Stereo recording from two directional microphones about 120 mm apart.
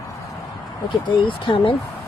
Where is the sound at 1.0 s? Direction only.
45° left (ahead or behind).